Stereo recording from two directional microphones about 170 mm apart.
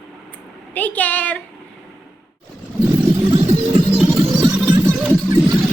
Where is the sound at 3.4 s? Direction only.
35° right (ahead or behind).